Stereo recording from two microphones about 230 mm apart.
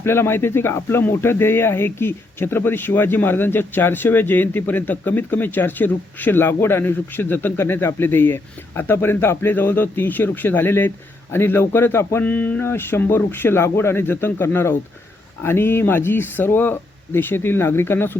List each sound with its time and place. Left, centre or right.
0.0 s speech: centre